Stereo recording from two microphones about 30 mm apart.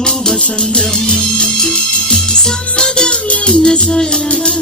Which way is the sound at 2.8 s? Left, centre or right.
Left.